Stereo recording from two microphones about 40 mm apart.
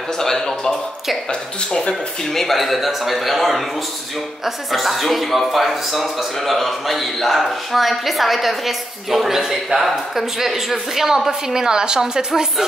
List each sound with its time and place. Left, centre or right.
0.2 s speech: centre
2.3 s a man's voice: centre
4.7 s a man's voice: centre